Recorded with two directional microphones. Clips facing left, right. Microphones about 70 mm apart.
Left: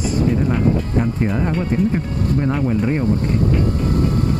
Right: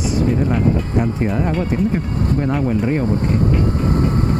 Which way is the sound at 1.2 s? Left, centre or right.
Centre.